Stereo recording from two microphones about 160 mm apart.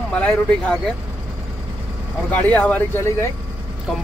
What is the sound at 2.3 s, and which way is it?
Speech, 10° left (ahead or behind).